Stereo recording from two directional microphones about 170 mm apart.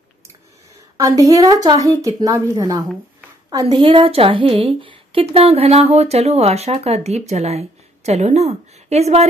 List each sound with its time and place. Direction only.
0.9 s a woman's voice: 20° right (ahead or behind); by 9.3 s 40° right (ahead or behind)